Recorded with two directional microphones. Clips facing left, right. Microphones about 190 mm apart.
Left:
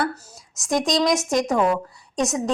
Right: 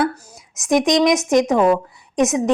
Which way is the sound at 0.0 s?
15° right (ahead or behind).